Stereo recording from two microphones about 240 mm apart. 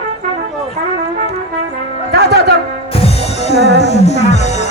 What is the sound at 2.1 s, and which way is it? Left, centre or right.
Music, right.